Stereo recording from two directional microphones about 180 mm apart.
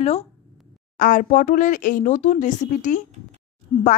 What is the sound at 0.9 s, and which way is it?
A woman's voice, 50° left (ahead or behind).